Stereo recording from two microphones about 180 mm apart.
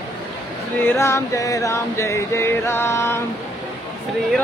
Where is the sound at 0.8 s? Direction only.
15° left (ahead or behind).